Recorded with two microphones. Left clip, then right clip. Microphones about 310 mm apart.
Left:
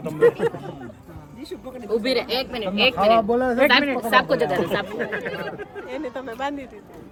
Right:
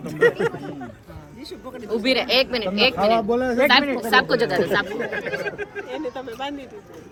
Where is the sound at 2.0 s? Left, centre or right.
Centre.